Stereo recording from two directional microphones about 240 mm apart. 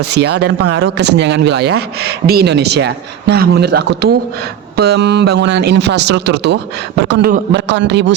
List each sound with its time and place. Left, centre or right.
0.0 s speech: right